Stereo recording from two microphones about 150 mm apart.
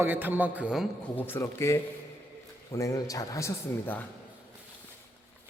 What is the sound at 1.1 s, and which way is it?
A man's voice, 15° left (ahead or behind).